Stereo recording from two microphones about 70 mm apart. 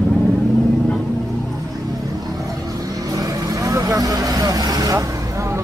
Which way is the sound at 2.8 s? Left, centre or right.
Right.